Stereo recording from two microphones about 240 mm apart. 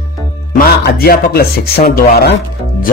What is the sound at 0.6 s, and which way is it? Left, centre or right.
Speech, left.